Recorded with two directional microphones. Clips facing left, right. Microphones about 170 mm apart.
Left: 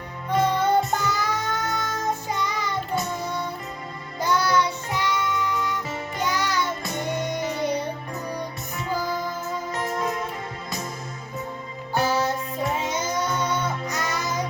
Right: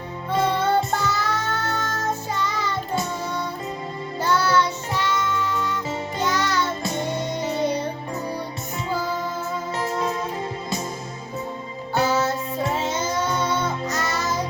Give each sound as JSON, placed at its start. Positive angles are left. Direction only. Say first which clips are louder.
{"t": 0.3, "sound": "music", "louder": "even", "side_deg": 10}
{"t": 4.2, "sound": "child singing", "louder": "right 1 dB", "side_deg": 15}
{"t": 6.2, "sound": "music", "louder": "right 2 dB", "side_deg": 10}
{"t": 6.8, "sound": "music", "louder": "right 3 dB", "side_deg": -20}
{"t": 7.2, "sound": "music", "louder": "right 2 dB", "side_deg": 15}
{"t": 9.7, "sound": "music", "louder": "right 2 dB", "side_deg": -30}
{"t": 12.7, "sound": "music", "louder": "right 2 dB", "side_deg": 15}